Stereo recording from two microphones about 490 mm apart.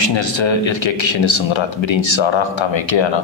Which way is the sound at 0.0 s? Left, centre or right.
Left.